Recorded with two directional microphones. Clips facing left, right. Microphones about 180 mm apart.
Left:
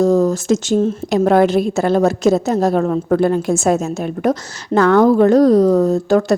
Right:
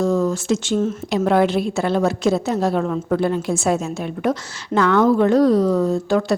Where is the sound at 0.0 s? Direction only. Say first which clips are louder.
Left 5 dB; 40° left (ahead or behind).